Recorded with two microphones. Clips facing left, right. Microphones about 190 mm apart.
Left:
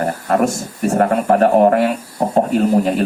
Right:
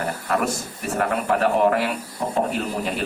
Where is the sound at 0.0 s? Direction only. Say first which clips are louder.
Left 7 dB; 40° left (ahead or behind).